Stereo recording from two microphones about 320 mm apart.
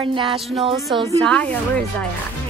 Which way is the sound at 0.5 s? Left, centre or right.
Centre.